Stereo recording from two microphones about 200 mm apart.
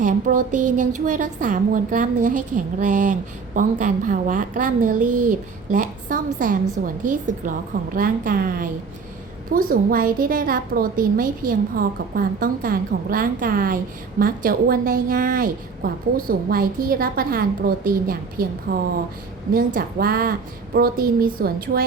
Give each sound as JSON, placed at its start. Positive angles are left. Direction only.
{"t": 0.0, "sound": "a woman's voice", "side_deg": -40}